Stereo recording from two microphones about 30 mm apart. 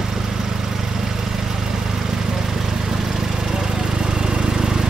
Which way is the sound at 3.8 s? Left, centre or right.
Right.